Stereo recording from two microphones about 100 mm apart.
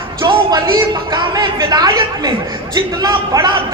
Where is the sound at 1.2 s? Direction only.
40° right (ahead or behind).